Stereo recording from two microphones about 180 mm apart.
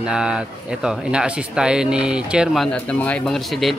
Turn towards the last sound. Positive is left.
turn(degrees=0)  # may be behind; listen again after turning